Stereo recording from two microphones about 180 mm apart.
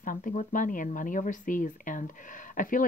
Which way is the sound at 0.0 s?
50° left (ahead or behind).